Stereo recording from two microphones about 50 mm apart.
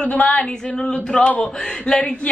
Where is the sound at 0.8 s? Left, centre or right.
Centre.